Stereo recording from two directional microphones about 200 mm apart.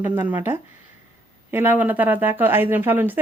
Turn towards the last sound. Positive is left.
turn(degrees=-10)  # may be behind; listen again after turning